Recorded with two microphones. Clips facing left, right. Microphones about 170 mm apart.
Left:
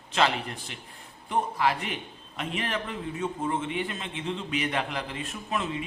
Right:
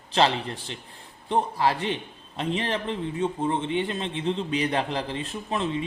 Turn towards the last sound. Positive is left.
turn(degrees=-30)  # may be behind; listen again after turning